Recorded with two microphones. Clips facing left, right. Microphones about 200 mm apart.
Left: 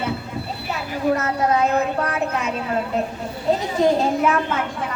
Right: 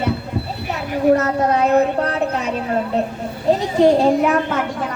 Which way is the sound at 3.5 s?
35° right (ahead or behind).